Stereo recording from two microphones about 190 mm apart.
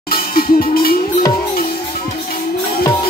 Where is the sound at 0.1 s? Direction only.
50° left (ahead or behind).